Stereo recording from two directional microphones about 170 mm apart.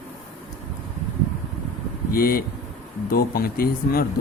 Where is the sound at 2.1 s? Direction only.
60° left (ahead or behind).